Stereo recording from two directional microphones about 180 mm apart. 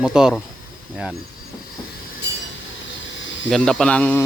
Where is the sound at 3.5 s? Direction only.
5° left (ahead or behind).